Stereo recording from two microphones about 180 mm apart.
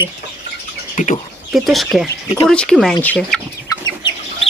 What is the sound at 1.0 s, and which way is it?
Speech, 45° left (ahead or behind).